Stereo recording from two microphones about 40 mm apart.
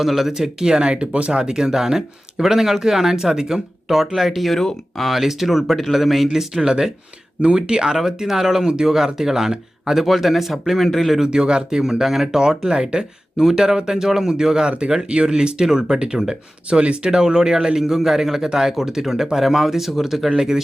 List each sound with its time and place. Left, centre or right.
0.0 s speech: centre
0.7 s speech: right
1.4 s speech: centre
6.3 s speech: centre
7.9 s speech: centre
11.2 s speech: right
17.1 s speech: centre